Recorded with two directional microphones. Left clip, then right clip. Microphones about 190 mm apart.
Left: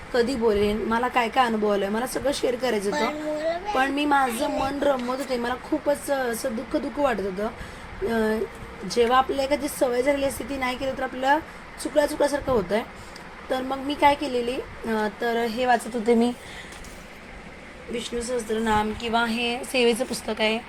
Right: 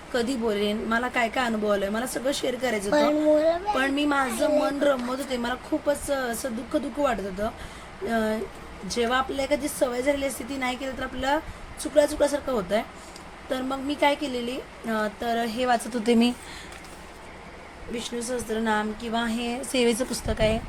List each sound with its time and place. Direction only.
0.1 s a woman's voice: 10° right (ahead or behind)
2.8 s a woman's voice: 35° right (ahead or behind)
3.8 s speech: 10° right (ahead or behind)
4.3 s a woman's voice: 30° right (ahead or behind)
4.6 s speech: 10° right (ahead or behind)
11.8 s speech: 10° right (ahead or behind)
17.9 s speech: 10° right (ahead or behind)
18.6 s a woman's voice: centre (ahead or behind)
19.7 s speech: 30° right (ahead or behind)
20.2 s speech: 20° right (ahead or behind)